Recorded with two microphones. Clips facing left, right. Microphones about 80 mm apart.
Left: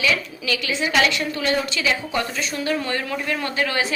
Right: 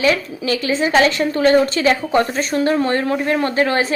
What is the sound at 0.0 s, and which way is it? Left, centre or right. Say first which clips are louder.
A woman's voice: right 6 dB; right.